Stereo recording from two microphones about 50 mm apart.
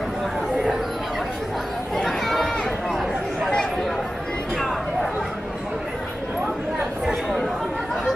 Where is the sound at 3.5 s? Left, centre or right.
Centre.